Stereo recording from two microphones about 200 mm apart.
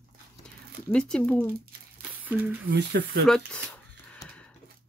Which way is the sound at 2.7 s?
65° right (ahead or behind).